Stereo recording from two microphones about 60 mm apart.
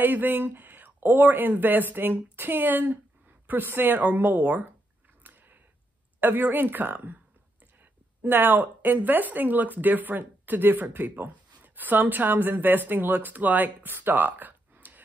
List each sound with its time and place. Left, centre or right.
0.0 s speech: right
5.2 s a sound: right
6.2 s speech: right
8.3 s speech: right